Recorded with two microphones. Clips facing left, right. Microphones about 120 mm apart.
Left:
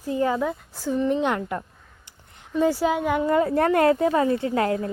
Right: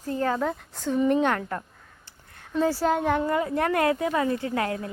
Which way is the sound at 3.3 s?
35° left (ahead or behind).